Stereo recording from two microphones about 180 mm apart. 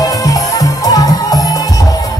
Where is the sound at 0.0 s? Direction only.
20° left (ahead or behind).